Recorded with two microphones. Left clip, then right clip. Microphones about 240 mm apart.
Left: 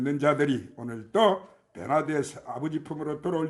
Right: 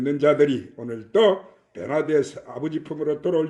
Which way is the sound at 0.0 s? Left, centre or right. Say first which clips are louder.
Right 6 dB; left.